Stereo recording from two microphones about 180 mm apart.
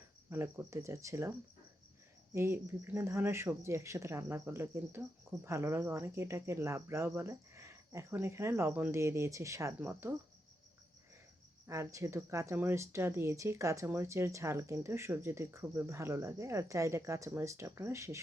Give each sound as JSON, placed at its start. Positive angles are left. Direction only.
{"t": 0.3, "sound": "speech", "side_deg": -10}
{"t": 2.3, "sound": "speech", "side_deg": -15}
{"t": 11.6, "sound": "speech", "side_deg": -15}